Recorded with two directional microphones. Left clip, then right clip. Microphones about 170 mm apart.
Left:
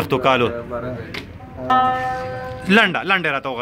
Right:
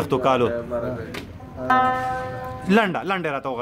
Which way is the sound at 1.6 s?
20° right (ahead or behind).